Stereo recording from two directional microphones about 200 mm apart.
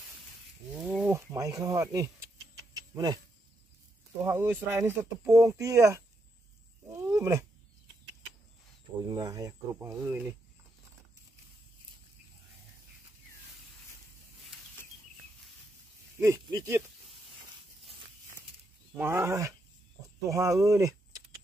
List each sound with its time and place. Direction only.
0.7 s a sound: 5° right (ahead or behind)
1.1 s speech: 15° right (ahead or behind)
2.7 s a sound: 20° right (ahead or behind)
4.2 s speech: 10° right (ahead or behind)
6.9 s roaring cats: 15° right (ahead or behind)
9.0 s speech: 20° right (ahead or behind)
16.2 s speech: 20° right (ahead or behind)
18.9 s speech: 10° right (ahead or behind)